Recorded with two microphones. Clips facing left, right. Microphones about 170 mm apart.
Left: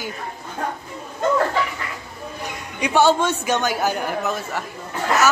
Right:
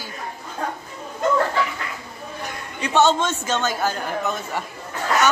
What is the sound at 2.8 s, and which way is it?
A man's voice, 10° left (ahead or behind).